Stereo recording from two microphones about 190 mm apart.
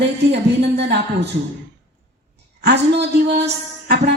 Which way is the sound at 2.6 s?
60° right (ahead or behind).